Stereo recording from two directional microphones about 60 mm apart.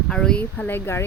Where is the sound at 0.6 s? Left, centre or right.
Left.